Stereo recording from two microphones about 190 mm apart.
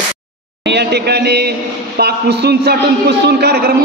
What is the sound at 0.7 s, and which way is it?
A man's voice, 60° right (ahead or behind).